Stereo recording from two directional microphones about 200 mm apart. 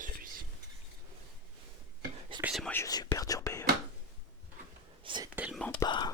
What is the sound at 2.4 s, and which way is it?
Whispering, 5° right (ahead or behind).